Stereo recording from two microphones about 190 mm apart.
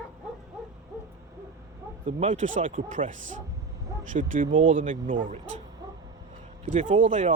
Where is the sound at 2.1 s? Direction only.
40° right (ahead or behind).